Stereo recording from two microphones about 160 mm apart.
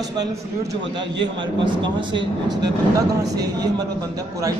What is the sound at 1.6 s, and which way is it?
Speech, 30° right (ahead or behind).